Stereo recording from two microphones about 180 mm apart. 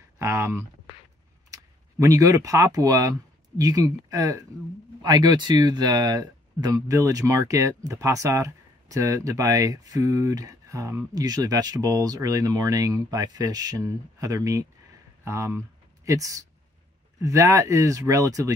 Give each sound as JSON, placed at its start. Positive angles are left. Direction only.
{"t": 0.2, "sound": "speech", "side_deg": -15}